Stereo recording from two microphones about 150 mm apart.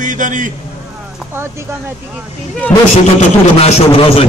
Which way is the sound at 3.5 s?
45° left (ahead or behind).